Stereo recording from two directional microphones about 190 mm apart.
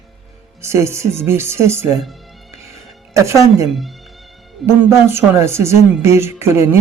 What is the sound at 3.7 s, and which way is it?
Speech, centre (ahead or behind).